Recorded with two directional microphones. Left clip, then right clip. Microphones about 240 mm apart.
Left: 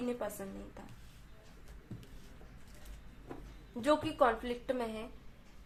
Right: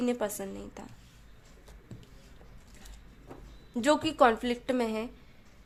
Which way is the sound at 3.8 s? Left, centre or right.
Right.